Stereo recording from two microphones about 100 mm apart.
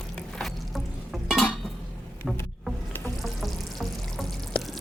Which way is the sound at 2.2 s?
5° right (ahead or behind).